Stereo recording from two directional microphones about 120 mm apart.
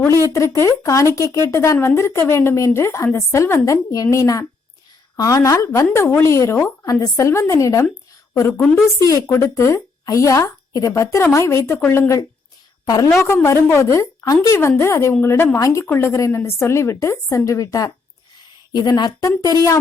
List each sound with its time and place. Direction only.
0.3 s a woman's voice: 25° left (ahead or behind)